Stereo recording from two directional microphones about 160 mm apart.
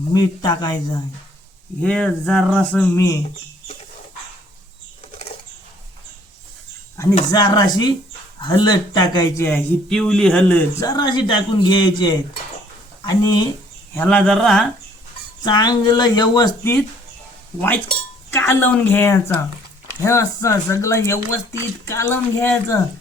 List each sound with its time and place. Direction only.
0.1 s speech: 25° left (ahead or behind)
1.8 s speech: 5° left (ahead or behind)
7.3 s speech: 25° left (ahead or behind)
9.4 s speech: 10° left (ahead or behind)
10.8 s speech: 25° left (ahead or behind)
13.9 s speech: 10° left (ahead or behind)
15.4 s speech: 25° left (ahead or behind)
18.3 s speech: 15° left (ahead or behind)